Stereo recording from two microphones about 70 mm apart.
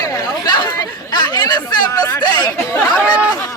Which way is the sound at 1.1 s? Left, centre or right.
Left.